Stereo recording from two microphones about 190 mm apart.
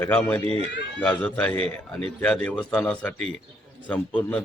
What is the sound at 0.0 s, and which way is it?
A man's voice, 10° left (ahead or behind).